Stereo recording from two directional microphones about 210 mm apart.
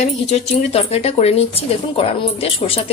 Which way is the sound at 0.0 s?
30° left (ahead or behind).